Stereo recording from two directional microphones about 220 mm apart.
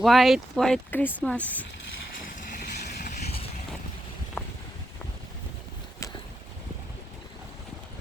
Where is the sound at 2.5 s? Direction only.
35° left (ahead or behind).